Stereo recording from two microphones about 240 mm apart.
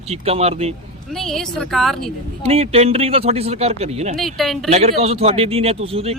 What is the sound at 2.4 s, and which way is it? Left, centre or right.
Speech, right.